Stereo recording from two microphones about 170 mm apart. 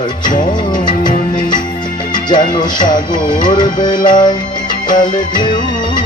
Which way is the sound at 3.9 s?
50° left (ahead or behind).